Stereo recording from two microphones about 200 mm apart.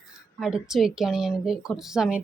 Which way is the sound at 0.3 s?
Centre (ahead or behind).